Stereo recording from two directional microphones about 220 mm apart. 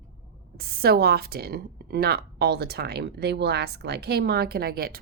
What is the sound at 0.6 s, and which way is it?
A woman's voice, 45° right (ahead or behind).